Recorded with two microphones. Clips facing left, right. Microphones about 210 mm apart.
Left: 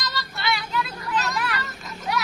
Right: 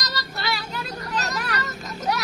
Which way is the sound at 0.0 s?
40° right (ahead or behind).